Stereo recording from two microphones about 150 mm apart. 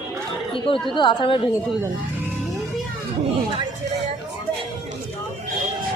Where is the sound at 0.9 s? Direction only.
35° left (ahead or behind).